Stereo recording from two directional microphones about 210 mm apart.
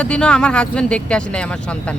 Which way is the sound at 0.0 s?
5° left (ahead or behind).